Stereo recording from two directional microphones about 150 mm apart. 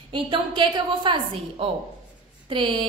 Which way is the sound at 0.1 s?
30° right (ahead or behind).